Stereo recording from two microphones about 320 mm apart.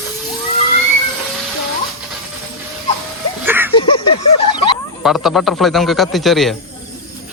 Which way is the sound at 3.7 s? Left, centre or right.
Centre.